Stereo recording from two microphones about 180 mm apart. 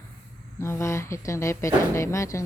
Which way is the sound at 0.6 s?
15° left (ahead or behind).